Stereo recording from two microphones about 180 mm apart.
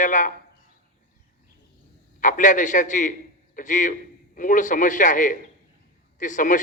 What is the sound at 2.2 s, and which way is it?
A man's voice, 45° left (ahead or behind).